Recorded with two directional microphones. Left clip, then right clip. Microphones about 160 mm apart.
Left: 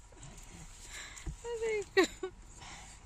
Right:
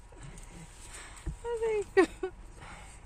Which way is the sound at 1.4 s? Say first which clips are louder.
Right 4 dB; 10° left (ahead or behind).